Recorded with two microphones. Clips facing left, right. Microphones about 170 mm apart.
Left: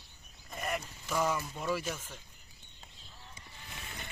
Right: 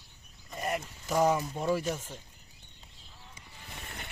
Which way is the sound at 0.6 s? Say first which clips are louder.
Right 3 dB; 35° right (ahead or behind).